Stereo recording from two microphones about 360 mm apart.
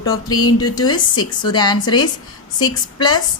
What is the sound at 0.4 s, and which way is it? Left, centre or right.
A woman's voice, centre.